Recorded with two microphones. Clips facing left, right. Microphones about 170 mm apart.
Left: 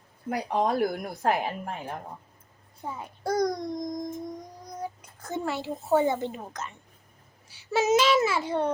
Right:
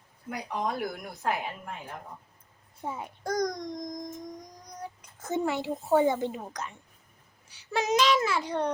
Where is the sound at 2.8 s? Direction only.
20° right (ahead or behind).